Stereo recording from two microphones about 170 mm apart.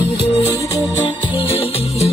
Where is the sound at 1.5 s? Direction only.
35° left (ahead or behind).